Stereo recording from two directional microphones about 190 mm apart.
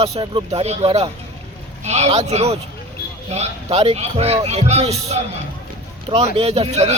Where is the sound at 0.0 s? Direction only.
30° right (ahead or behind).